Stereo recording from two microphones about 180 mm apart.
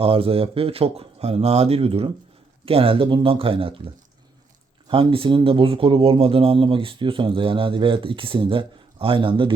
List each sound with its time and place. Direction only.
0.0 s speech: 30° right (ahead or behind)
4.9 s speech: 30° right (ahead or behind)